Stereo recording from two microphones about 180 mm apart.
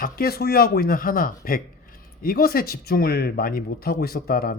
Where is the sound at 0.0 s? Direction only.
55° left (ahead or behind).